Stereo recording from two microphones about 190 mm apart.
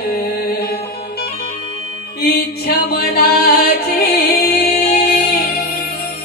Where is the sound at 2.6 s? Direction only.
55° left (ahead or behind).